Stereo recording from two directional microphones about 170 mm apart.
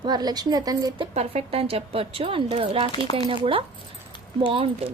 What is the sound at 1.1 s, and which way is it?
A woman's voice, 40° right (ahead or behind).